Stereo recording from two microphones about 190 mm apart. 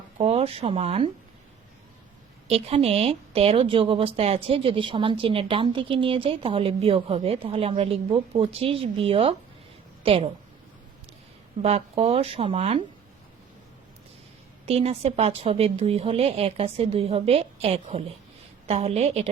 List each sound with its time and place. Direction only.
0.2 s speech: 30° right (ahead or behind)
2.5 s a woman's voice: 30° right (ahead or behind)
11.6 s a woman's voice: 30° right (ahead or behind)
14.7 s a woman's voice: 30° right (ahead or behind)